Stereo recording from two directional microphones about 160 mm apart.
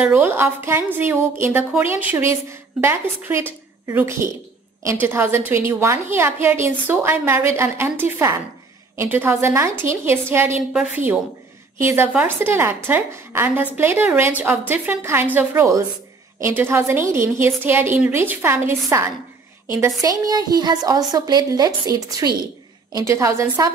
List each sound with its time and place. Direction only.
0.0 s a woman's voice: 15° right (ahead or behind)
11.8 s a woman's voice: 15° right (ahead or behind)